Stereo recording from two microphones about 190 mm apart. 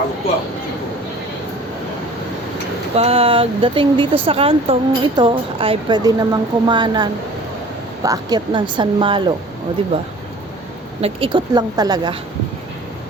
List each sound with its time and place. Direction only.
2.9 s speech: 30° right (ahead or behind)
11.0 s speech: 25° right (ahead or behind)